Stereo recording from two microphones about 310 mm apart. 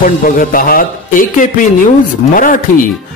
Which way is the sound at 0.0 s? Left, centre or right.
Left.